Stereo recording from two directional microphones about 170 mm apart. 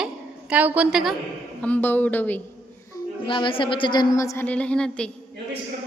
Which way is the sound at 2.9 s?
30° left (ahead or behind).